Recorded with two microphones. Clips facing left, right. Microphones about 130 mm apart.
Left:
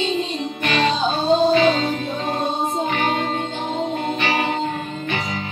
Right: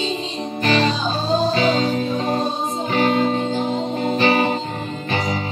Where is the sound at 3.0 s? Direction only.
35° right (ahead or behind).